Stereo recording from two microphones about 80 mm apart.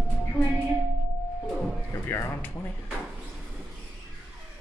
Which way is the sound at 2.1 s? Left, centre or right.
Left.